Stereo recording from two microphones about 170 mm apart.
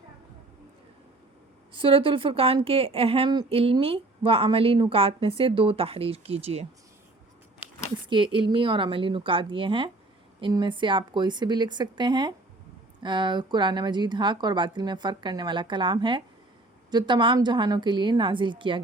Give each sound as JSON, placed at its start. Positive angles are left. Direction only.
{"t": 1.7, "sound": "a woman's voice", "side_deg": -30}
{"t": 8.1, "sound": "a woman's voice", "side_deg": -30}